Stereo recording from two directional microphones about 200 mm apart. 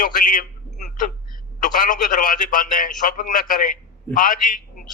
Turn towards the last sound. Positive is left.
turn(degrees=40)  # may be behind; listen again after turning